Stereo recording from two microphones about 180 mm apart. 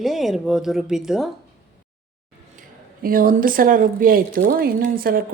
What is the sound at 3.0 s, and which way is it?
Speech, 50° right (ahead or behind).